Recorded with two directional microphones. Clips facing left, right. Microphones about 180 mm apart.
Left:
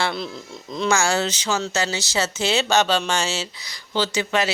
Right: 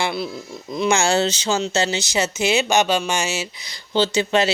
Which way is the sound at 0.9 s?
25° right (ahead or behind).